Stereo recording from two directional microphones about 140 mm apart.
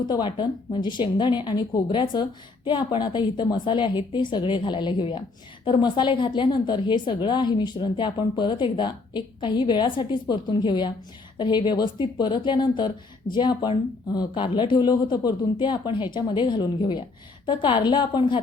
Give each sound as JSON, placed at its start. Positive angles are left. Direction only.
{"t": 0.1, "sound": "a woman's voice", "side_deg": 35}